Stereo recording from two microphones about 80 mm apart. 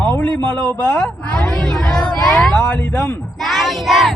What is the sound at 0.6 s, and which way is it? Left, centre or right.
Speech, centre.